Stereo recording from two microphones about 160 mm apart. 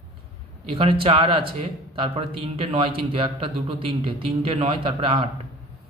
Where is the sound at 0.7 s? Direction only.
35° right (ahead or behind).